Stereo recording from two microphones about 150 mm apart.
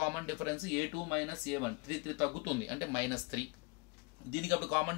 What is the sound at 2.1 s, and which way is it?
Speech, 15° right (ahead or behind).